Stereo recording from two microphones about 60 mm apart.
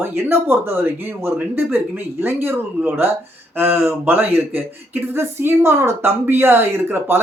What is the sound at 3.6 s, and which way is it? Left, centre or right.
Speech, right.